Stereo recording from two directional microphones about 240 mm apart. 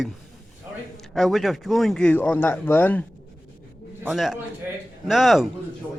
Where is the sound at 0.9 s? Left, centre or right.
Centre.